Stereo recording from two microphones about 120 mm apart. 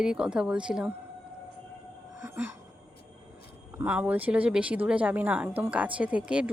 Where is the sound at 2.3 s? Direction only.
15° right (ahead or behind).